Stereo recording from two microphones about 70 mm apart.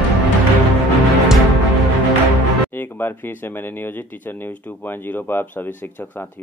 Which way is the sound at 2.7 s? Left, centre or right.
Left.